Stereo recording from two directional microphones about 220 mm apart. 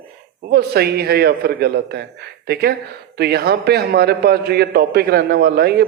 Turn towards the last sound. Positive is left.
turn(degrees=-45)  # may be behind; listen again after turning